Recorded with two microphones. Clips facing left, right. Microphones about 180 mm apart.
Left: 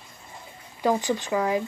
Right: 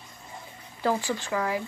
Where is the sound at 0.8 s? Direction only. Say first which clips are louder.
Left 3 dB; 20° left (ahead or behind).